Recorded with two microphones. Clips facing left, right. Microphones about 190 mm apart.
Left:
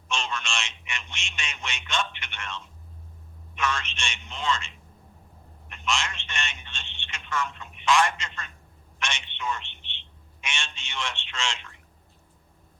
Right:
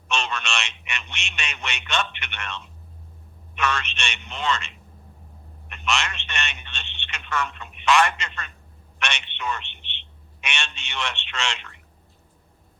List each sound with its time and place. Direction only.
0.1 s a man's voice: 65° right (ahead or behind)